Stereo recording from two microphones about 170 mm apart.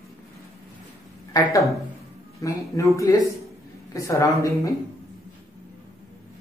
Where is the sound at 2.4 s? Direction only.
20° left (ahead or behind).